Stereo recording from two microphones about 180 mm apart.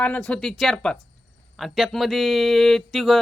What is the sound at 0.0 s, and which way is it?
Mantra, 5° left (ahead or behind).